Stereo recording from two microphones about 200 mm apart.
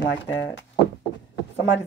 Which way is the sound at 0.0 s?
65° left (ahead or behind).